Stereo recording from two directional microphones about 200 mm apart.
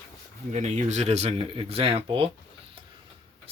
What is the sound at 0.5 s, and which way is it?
Speech, 35° right (ahead or behind).